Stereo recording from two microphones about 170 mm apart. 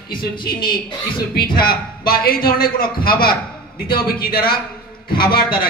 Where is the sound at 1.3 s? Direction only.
60° left (ahead or behind).